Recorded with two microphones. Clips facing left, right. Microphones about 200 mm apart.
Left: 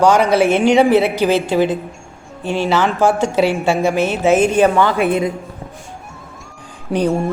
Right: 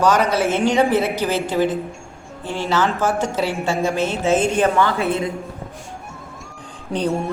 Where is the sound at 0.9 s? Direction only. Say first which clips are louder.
Left 6 dB; 70° left (ahead or behind).